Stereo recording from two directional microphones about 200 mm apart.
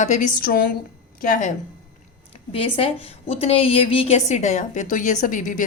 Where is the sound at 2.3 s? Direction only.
30° left (ahead or behind).